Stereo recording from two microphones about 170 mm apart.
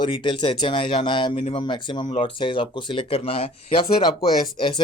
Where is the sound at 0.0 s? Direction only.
30° left (ahead or behind).